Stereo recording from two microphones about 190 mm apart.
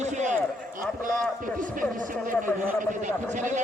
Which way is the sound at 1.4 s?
45° right (ahead or behind).